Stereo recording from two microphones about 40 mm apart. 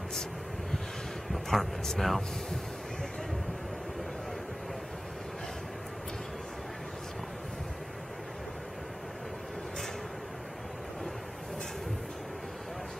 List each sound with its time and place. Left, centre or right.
1.3 s vehicle: centre
2.0 s speech: centre